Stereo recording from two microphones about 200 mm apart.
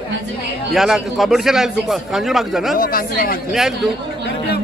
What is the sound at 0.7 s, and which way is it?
A man's voice, centre (ahead or behind).